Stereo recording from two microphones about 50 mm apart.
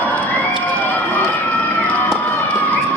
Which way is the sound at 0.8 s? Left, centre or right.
Left.